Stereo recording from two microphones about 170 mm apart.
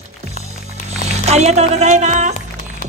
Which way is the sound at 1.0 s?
40° right (ahead or behind).